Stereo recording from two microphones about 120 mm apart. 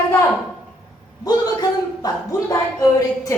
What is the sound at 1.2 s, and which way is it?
A man's voice, 35° left (ahead or behind).